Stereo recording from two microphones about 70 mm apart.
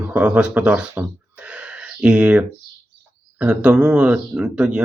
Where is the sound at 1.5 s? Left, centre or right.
Centre.